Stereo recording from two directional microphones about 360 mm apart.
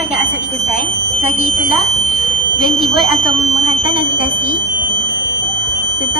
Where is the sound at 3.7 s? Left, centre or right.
Centre.